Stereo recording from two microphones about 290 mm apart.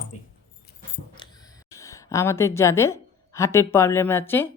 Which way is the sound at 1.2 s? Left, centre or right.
Centre.